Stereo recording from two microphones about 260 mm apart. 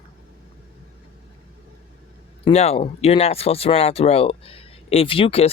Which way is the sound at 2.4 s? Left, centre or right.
Left.